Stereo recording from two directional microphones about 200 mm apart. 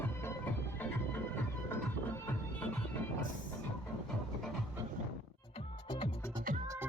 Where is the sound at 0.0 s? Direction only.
10° left (ahead or behind).